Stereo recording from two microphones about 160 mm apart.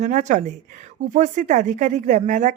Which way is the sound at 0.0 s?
50° right (ahead or behind).